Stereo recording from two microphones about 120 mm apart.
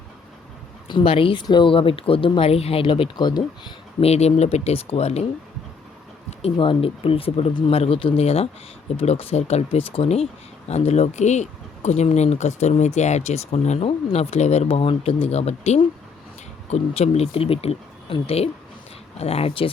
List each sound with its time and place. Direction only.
0.9 s speech: 45° left (ahead or behind)
4.0 s speech: 60° left (ahead or behind)
6.4 s speech: 45° left (ahead or behind)